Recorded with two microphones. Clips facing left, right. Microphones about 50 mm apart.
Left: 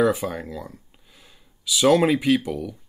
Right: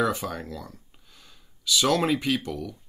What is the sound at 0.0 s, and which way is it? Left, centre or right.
Speech, centre.